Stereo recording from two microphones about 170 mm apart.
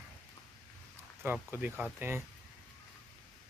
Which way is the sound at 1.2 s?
10° right (ahead or behind).